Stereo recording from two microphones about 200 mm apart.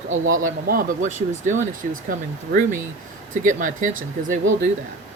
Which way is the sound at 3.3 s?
40° right (ahead or behind).